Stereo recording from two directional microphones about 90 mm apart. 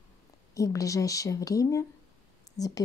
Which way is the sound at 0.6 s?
40° left (ahead or behind).